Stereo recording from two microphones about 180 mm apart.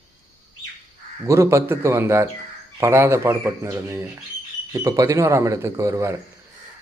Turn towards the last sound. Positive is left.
turn(degrees=-15)  # may be behind; listen again after turning